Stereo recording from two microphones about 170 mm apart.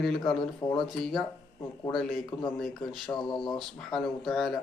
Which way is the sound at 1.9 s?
Centre (ahead or behind).